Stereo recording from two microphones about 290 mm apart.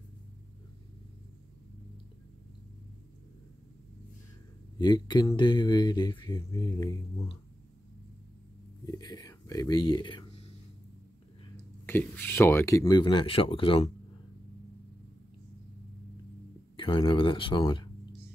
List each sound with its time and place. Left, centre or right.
4.7 s speech: centre
8.8 s speech: centre
11.5 s speech: centre
16.7 s speech: centre